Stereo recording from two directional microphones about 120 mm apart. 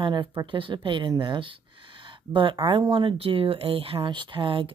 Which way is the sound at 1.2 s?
45° right (ahead or behind).